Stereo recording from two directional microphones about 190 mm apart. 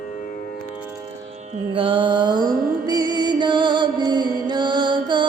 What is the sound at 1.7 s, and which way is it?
Mantra, 25° right (ahead or behind).